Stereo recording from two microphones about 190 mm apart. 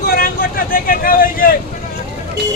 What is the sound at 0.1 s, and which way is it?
Vehicle, 50° left (ahead or behind).